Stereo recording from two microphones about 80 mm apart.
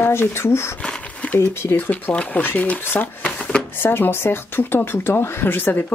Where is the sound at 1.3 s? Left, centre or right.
Left.